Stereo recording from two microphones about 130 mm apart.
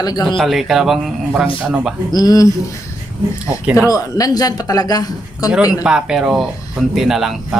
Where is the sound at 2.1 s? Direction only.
30° left (ahead or behind).